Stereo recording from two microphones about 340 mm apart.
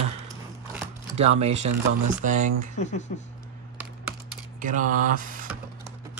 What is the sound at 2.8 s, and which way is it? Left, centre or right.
Speech, centre.